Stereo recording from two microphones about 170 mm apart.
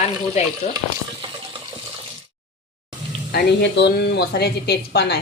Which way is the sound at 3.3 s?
85° left.